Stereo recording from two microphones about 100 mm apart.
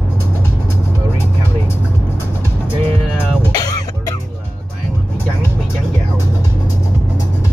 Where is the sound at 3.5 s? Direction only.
40° left (ahead or behind).